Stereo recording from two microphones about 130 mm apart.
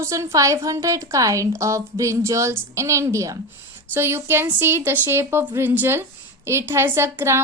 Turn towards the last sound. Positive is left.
turn(degrees=-20)  # may be behind; listen again after turning